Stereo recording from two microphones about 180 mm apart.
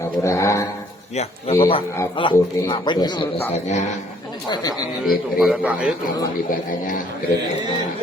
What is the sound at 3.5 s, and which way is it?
Speech, 40° left (ahead or behind).